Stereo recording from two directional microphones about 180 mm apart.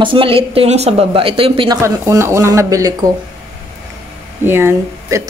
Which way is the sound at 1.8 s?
15° right (ahead or behind).